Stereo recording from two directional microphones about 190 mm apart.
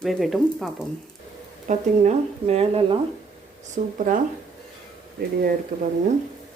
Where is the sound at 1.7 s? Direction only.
35° right (ahead or behind).